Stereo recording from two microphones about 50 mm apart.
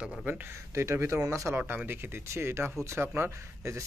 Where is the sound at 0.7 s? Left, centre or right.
Right.